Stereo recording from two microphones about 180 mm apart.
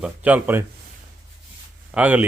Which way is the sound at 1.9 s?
10° right (ahead or behind).